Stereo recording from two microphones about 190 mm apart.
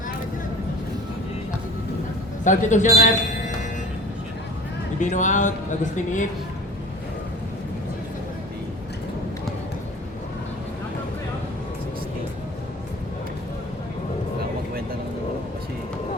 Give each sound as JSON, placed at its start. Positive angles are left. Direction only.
{"t": 2.4, "sound": "a man's voice", "side_deg": 40}
{"t": 4.9, "sound": "speech", "side_deg": 40}